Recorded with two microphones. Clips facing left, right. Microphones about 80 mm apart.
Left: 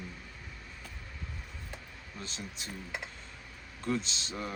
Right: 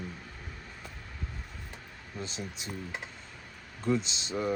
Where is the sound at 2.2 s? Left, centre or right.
Centre.